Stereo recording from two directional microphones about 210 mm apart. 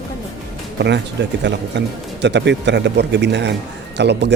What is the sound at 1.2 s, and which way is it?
Speech, 55° right (ahead or behind).